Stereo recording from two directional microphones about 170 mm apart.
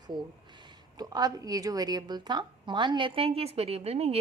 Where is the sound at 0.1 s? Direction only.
25° right (ahead or behind).